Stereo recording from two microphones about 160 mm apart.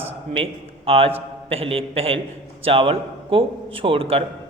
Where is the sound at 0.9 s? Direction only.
35° right (ahead or behind).